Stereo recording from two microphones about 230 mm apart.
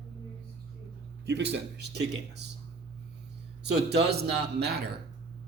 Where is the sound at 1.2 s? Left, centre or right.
Right.